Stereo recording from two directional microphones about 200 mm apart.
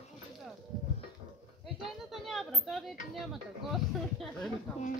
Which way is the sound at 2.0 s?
Centre (ahead or behind).